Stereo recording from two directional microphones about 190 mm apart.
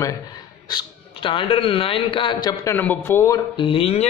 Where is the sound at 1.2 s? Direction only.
30° left (ahead or behind).